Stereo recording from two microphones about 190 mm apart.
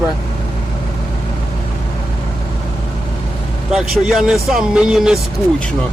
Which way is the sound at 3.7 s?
Centre (ahead or behind).